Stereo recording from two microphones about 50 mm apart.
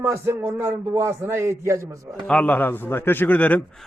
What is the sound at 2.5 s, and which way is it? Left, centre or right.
A man's voice, left.